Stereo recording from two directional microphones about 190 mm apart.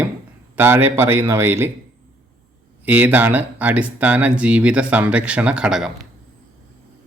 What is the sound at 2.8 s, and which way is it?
Speech, 10° right (ahead or behind).